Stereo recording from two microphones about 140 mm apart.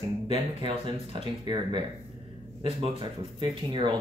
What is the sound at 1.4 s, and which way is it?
Speech, 35° right (ahead or behind).